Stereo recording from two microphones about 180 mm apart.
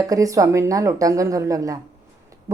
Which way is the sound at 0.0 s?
20° right (ahead or behind).